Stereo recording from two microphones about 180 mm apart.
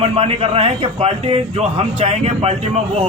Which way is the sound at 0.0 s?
35° right (ahead or behind).